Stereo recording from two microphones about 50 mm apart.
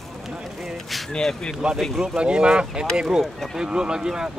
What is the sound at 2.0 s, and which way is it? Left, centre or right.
Speech, centre.